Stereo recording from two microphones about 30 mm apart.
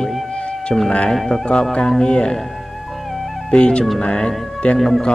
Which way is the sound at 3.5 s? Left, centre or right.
Left.